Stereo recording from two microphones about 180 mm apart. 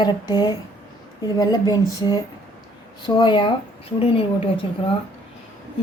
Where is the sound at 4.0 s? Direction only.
30° left (ahead or behind).